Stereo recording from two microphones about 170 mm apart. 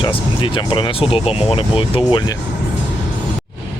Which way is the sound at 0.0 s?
30° left (ahead or behind).